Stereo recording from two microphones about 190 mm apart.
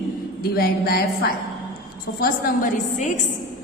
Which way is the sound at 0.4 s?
55° left (ahead or behind).